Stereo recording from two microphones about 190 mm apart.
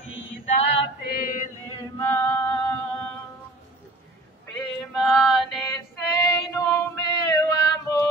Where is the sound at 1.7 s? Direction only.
15° left (ahead or behind).